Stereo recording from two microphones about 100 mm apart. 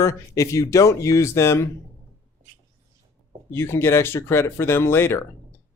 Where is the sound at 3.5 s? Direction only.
25° left (ahead or behind).